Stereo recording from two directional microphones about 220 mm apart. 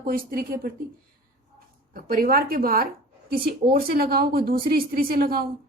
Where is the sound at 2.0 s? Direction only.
40° right (ahead or behind).